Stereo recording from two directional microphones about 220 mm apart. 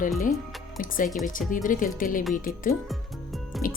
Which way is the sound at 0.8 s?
40° left (ahead or behind).